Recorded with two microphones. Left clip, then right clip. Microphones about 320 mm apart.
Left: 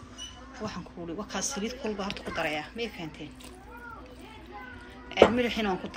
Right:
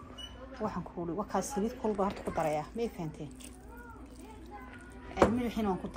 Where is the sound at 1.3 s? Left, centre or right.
Centre.